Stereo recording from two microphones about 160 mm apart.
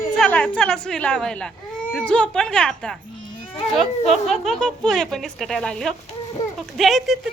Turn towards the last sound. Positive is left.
turn(degrees=0)  # may be behind; listen again after turning